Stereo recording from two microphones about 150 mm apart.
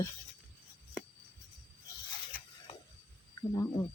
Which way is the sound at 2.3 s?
75° left (ahead or behind).